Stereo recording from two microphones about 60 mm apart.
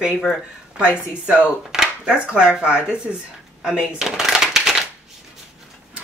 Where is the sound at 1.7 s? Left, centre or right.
Centre.